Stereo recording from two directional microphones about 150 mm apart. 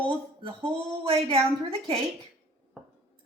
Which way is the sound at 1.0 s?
40° right (ahead or behind).